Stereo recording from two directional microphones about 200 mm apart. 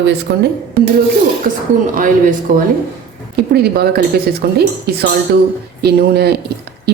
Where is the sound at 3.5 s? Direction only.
50° right (ahead or behind).